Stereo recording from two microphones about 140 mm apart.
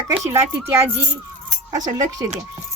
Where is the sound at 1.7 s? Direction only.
25° right (ahead or behind).